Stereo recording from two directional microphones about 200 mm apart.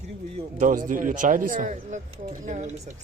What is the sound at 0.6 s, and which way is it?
Speech, 45° right (ahead or behind).